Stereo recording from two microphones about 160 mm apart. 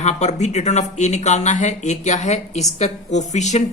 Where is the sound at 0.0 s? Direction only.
45° left (ahead or behind).